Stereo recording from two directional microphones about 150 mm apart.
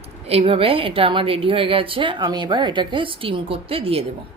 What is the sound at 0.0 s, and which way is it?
A woman's voice, 40° right (ahead or behind).